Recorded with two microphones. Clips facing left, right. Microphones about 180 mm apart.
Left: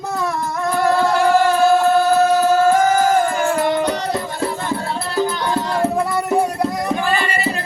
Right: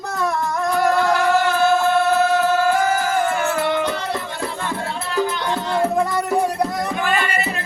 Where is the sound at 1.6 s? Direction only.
40° left (ahead or behind).